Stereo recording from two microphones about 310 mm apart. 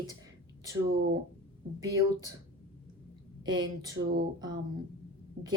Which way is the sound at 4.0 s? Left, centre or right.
Right.